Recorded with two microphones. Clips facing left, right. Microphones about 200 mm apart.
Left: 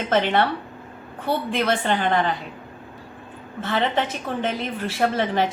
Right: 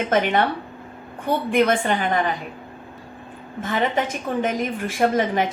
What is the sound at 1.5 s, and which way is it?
Speech, 15° right (ahead or behind).